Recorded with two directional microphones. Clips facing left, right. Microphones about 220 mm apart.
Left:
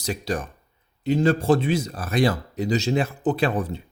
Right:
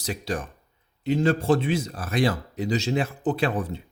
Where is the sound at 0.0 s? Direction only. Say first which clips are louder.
Left 2 dB; 40° left (ahead or behind).